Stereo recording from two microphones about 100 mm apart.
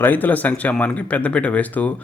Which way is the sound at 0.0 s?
15° left (ahead or behind).